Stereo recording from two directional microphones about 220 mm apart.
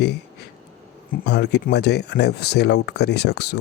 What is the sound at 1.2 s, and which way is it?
Speech, 50° left (ahead or behind).